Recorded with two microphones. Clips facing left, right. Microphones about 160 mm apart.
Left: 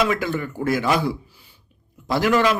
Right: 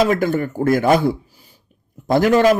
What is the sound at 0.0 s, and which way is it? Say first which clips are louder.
Speech: right 5 dB; 45° right (ahead or behind).